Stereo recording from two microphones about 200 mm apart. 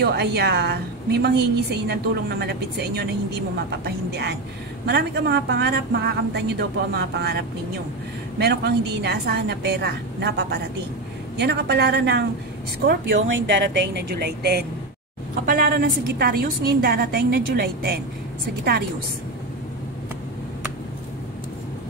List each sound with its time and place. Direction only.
0.0 s a woman's voice: 55° right (ahead or behind)